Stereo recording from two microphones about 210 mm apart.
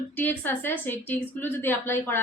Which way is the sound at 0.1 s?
10° left (ahead or behind).